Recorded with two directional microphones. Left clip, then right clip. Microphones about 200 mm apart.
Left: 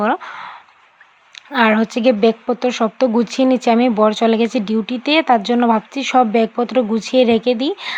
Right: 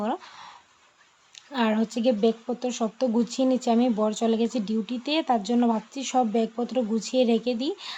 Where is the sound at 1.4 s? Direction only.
15° left (ahead or behind).